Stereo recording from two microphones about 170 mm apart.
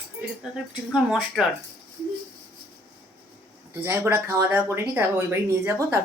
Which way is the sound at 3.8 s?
15° right (ahead or behind).